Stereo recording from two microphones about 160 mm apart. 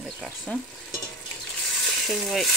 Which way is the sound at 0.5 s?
10° left (ahead or behind).